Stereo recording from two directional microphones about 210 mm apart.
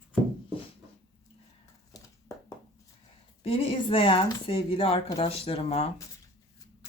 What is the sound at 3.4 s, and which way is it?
Speech, 25° left (ahead or behind).